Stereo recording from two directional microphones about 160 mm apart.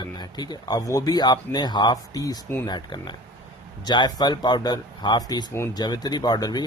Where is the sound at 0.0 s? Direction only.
25° left (ahead or behind).